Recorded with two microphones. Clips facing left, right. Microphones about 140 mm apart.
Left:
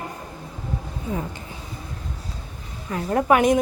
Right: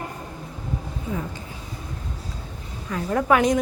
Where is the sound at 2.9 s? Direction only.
30° left (ahead or behind).